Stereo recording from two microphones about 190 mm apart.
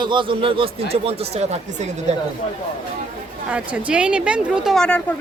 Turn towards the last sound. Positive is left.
turn(degrees=5)  # may be behind; listen again after turning